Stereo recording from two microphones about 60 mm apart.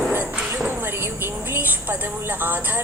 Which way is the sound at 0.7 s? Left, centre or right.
Right.